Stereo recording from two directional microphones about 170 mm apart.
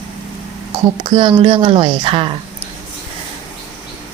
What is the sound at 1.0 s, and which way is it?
A woman's voice, 30° right (ahead or behind).